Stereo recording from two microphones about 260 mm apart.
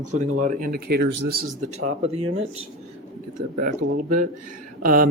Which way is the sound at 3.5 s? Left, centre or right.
Right.